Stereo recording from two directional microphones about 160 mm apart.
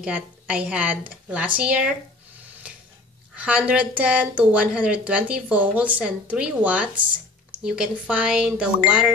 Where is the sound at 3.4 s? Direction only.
10° right (ahead or behind).